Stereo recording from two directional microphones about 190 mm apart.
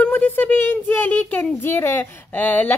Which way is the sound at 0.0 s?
10° left (ahead or behind).